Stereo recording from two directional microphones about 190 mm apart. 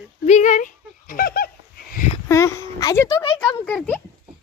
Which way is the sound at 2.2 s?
15° left (ahead or behind).